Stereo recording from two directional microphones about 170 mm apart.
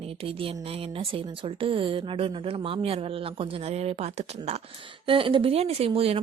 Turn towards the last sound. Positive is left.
turn(degrees=-35)  # may be behind; listen again after turning